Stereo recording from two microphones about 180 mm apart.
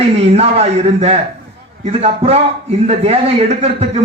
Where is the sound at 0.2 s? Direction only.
35° right (ahead or behind).